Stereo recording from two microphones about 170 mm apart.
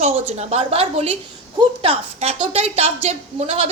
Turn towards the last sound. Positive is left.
turn(degrees=-40)  # may be behind; listen again after turning